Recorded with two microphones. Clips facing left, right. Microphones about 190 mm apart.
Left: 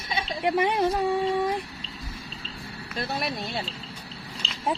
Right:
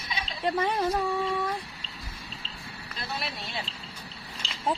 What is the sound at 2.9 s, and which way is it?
Speech, 50° left (ahead or behind).